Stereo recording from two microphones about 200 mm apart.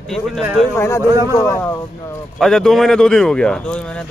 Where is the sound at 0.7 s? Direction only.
10° left (ahead or behind).